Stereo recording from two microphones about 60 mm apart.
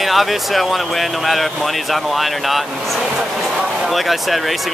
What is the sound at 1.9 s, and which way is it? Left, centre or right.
Speech, centre.